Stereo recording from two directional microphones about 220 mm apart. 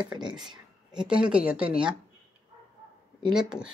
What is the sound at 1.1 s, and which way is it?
Speech, 5° right (ahead or behind).